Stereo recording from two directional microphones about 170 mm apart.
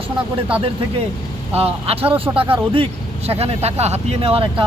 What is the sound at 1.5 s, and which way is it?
Speech, 35° right (ahead or behind).